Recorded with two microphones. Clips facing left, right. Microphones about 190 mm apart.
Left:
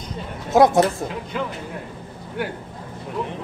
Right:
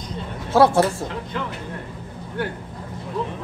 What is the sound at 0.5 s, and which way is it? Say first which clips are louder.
Speech: left 1 dB; 15° left (ahead or behind).